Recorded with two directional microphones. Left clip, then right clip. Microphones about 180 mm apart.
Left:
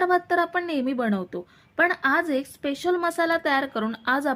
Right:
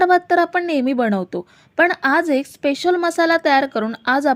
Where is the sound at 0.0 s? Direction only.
35° right (ahead or behind).